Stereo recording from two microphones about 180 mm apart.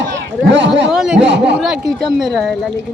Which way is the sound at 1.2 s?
75° right (ahead or behind).